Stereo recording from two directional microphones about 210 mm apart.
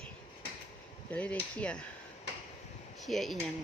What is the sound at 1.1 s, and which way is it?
Speech, 5° left (ahead or behind).